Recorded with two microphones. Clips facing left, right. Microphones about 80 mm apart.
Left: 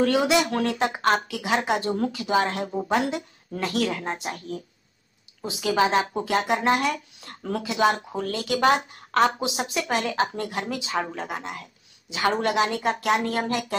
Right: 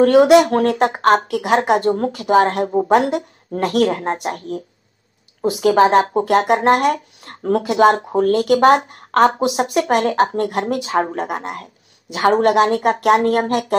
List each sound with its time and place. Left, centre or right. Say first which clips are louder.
0.0 s speech: right 11 dB; right